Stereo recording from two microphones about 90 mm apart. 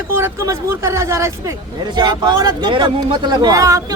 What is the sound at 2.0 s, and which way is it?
Speech, 50° right (ahead or behind).